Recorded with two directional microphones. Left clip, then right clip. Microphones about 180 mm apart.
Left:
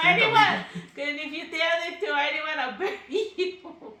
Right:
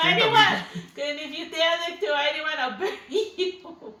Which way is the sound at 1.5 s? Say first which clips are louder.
Right 2 dB; 15° left (ahead or behind).